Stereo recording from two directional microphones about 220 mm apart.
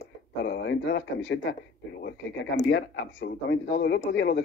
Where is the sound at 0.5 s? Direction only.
50° left (ahead or behind).